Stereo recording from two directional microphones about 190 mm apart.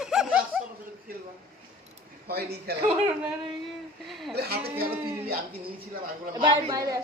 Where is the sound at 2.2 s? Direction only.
55° right (ahead or behind).